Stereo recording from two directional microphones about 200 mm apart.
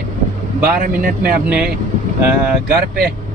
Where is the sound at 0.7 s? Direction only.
45° right (ahead or behind).